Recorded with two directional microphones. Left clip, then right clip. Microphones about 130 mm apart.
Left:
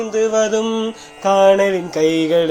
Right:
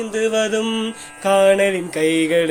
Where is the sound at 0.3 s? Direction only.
35° right (ahead or behind).